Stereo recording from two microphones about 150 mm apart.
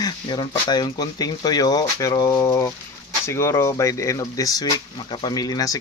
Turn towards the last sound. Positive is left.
turn(degrees=25)  # may be behind; listen again after turning